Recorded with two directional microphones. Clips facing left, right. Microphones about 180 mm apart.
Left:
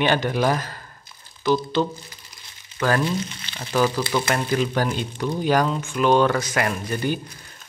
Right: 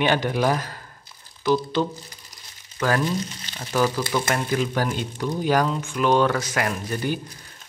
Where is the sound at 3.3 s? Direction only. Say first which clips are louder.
Even; 40° right (ahead or behind).